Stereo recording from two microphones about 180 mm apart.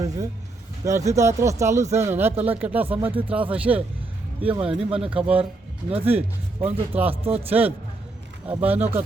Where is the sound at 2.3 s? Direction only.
35° right (ahead or behind).